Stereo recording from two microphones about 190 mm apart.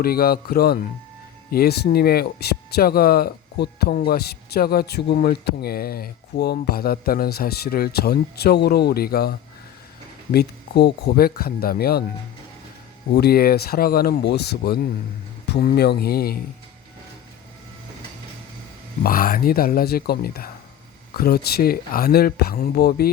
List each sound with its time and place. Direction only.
0.0 s speech: 55° left (ahead or behind)
10.3 s speech: 60° left (ahead or behind)
13.1 s speech: 55° left (ahead or behind)
19.0 s speech: 50° left (ahead or behind)